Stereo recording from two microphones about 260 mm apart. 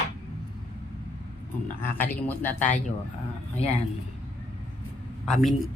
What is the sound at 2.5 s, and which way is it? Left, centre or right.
Speech, left.